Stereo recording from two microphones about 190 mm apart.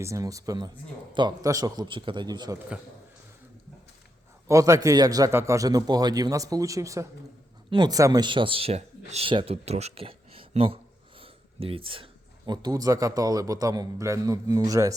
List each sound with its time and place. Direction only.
0.0 s a man's voice: 15° right (ahead or behind)
4.4 s a man's voice: 15° right (ahead or behind)
11.2 s a sound: 30° right (ahead or behind)
12.5 s a man's voice: 20° right (ahead or behind)